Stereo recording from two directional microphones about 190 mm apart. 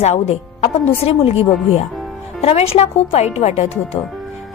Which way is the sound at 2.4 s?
30° left (ahead or behind).